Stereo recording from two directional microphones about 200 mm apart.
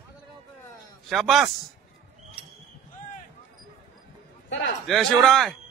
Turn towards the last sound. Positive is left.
turn(degrees=0)  # may be behind; listen again after turning